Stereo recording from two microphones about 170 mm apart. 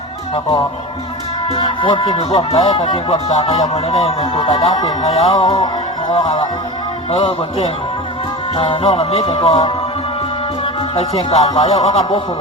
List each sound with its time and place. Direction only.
1.5 s speech: 30° left (ahead or behind)
10.9 s speech: 35° left (ahead or behind)